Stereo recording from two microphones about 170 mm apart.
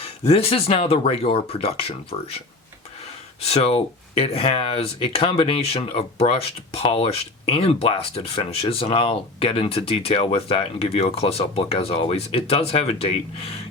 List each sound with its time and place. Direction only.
0.0 s speech: 35° left (ahead or behind)
3.4 s speech: 35° left (ahead or behind)